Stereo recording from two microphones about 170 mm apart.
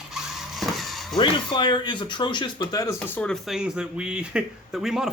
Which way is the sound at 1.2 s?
30° left (ahead or behind).